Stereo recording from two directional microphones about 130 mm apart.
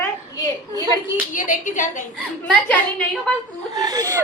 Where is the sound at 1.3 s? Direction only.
90° left.